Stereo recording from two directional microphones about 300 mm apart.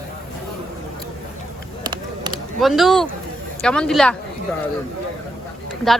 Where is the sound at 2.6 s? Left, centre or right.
Centre.